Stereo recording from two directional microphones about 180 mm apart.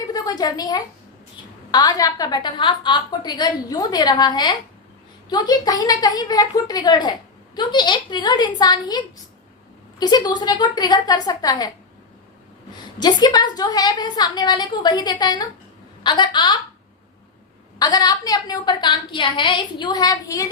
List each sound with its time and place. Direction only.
0.1 s a sound: 20° left (ahead or behind)
1.7 s a woman's voice: 20° left (ahead or behind)
10.0 s a woman's voice: 25° left (ahead or behind)
13.0 s a woman's voice: 25° left (ahead or behind)
17.7 s a woman's voice: 20° left (ahead or behind)